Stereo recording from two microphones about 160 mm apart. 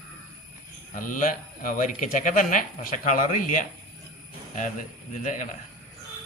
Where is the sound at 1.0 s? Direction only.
55° left (ahead or behind).